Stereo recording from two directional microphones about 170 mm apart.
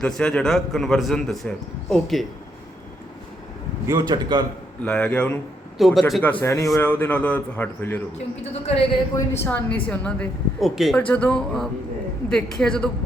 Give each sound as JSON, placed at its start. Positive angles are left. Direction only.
{"t": 0.0, "sound": "a man's voice", "side_deg": 5}
{"t": 3.8, "sound": "a man's voice", "side_deg": -25}
{"t": 4.8, "sound": "a woman's voice", "side_deg": 5}
{"t": 6.4, "sound": "a woman's voice", "side_deg": 20}
{"t": 8.6, "sound": "a woman's voice", "side_deg": 30}
{"t": 9.4, "sound": "a woman's voice", "side_deg": 10}